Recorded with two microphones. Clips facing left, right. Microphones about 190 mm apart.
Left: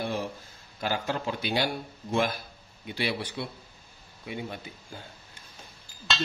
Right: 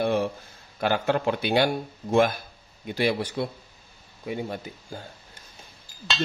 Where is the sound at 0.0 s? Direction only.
60° right (ahead or behind).